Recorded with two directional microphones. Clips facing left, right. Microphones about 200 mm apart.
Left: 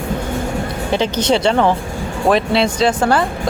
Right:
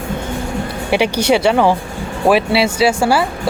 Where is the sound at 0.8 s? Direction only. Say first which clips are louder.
Right 2 dB; 10° right (ahead or behind).